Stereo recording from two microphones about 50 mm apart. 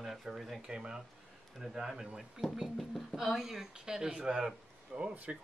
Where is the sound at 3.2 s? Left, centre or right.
Centre.